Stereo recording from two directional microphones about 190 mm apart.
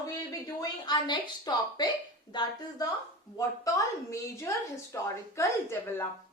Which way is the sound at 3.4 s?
15° left (ahead or behind).